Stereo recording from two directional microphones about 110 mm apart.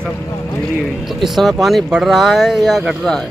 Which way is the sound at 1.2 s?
Centre (ahead or behind).